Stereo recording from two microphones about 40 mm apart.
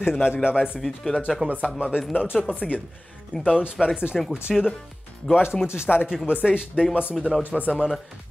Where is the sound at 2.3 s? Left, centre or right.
Centre.